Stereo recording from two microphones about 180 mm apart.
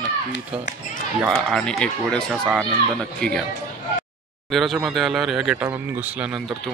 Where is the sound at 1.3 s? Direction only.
Centre (ahead or behind).